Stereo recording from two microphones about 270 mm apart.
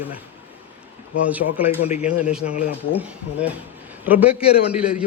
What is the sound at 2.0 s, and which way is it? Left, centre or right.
Speech, centre.